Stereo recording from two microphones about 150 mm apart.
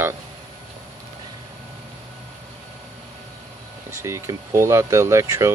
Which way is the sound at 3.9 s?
20° right (ahead or behind).